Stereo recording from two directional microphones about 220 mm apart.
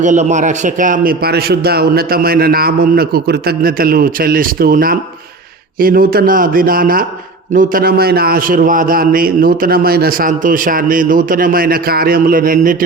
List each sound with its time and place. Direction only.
0.0 s a man's voice: 35° right (ahead or behind)